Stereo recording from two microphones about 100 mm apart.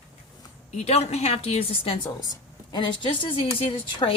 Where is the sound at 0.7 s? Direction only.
90° left; by 2.1 s 65° left (ahead or behind).